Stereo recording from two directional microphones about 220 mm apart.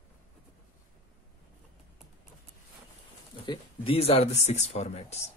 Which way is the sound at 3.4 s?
25° left (ahead or behind).